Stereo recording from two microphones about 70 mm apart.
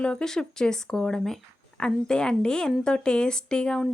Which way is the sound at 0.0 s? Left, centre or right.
Centre.